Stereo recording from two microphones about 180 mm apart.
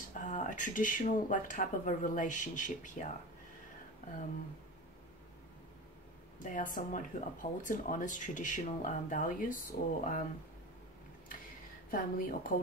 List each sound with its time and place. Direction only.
0.1 s speech: 45° left (ahead or behind)
6.4 s speech: 50° left (ahead or behind)
11.9 s speech: 50° left (ahead or behind)